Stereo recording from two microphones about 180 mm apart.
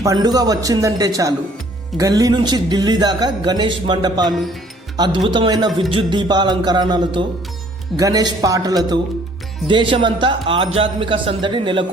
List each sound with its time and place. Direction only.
0.0 s speech: 20° right (ahead or behind)